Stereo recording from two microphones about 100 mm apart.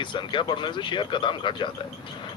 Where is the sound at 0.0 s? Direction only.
55° left (ahead or behind).